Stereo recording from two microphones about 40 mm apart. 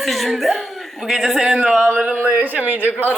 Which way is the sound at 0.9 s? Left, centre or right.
Centre.